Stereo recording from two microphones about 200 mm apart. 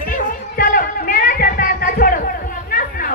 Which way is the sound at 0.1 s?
45° left (ahead or behind).